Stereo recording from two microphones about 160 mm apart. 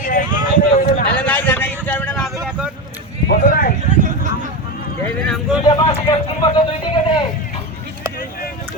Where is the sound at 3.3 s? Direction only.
65° left (ahead or behind).